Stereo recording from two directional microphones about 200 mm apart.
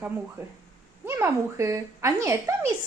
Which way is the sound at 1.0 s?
10° right (ahead or behind).